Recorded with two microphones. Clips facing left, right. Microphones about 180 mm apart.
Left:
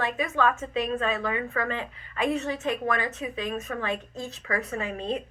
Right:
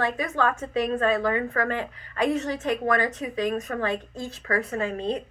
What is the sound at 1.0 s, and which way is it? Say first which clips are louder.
A woman's voice: right 5 dB; 35° right (ahead or behind).